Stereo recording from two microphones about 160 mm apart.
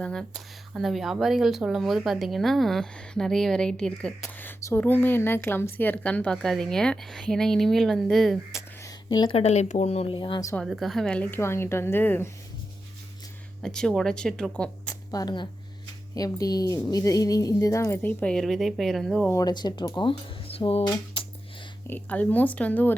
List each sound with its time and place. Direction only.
0.0 s speech: 5° left (ahead or behind)
8.8 s a sound: 25° left (ahead or behind)
9.4 s speech: 45° left (ahead or behind)
10.5 s a woman's voice: centre (ahead or behind)
13.6 s speech: 5° left (ahead or behind)
15.1 s a woman's voice: 25° left (ahead or behind); by 19.3 s centre (ahead or behind)
19.3 s a woman's voice: 25° left (ahead or behind)
21.8 s a woman's voice: 10° left (ahead or behind)